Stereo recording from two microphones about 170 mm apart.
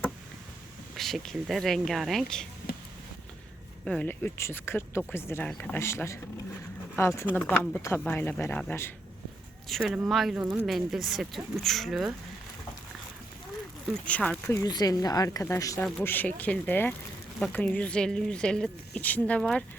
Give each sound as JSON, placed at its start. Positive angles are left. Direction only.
{"t": 0.9, "sound": "speech", "side_deg": 0}
{"t": 3.8, "sound": "speech", "side_deg": 5}
{"t": 9.6, "sound": "speech", "side_deg": 0}
{"t": 14.0, "sound": "speech", "side_deg": 5}
{"t": 14.5, "sound": "speech", "side_deg": 20}